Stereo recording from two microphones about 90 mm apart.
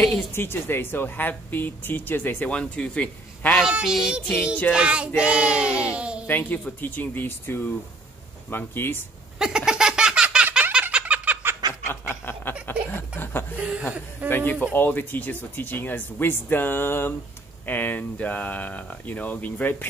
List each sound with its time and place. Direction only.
0.1 s a woman's voice: 25° left (ahead or behind)
3.6 s speech: 10° right (ahead or behind)
6.2 s a woman's voice: 20° left (ahead or behind)
9.4 s a sound: 10° right (ahead or behind)
11.9 s snicker: 25° left (ahead or behind)
12.9 s chuckle: 25° left (ahead or behind)
13.6 s speech: 10° right (ahead or behind)
14.3 s a woman's voice: 20° left (ahead or behind)